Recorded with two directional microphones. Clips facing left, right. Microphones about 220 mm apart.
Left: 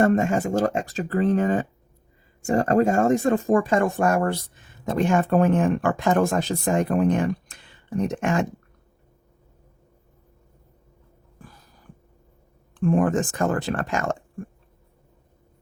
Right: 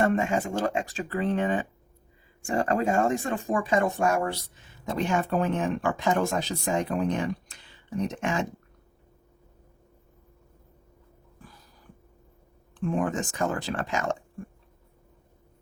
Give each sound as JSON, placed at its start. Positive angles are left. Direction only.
{"t": 0.0, "sound": "speech", "side_deg": 40}
{"t": 12.7, "sound": "speech", "side_deg": 50}